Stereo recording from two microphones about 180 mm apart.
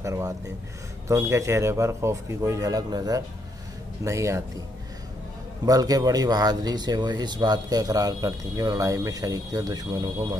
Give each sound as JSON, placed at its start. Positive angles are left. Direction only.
{"t": 0.0, "sound": "a sound", "side_deg": -15}
{"t": 1.0, "sound": "a man's voice", "side_deg": -15}
{"t": 5.7, "sound": "speech", "side_deg": -20}